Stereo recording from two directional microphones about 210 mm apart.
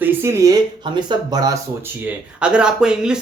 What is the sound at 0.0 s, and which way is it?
Speech, 10° right (ahead or behind).